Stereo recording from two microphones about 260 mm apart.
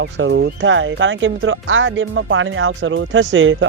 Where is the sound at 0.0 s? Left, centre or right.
Right.